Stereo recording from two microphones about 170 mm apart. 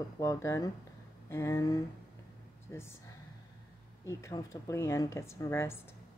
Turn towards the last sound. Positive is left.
turn(degrees=15)  # may be behind; listen again after turning